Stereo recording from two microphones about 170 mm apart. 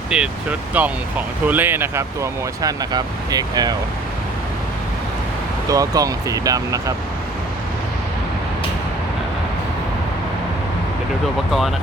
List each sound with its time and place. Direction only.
0.1 s speech: 5° right (ahead or behind); by 3.8 s 25° right (ahead or behind)
5.6 s speech: 20° right (ahead or behind)